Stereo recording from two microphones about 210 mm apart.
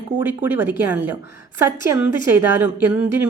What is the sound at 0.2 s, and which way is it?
A woman's voice, 10° right (ahead or behind).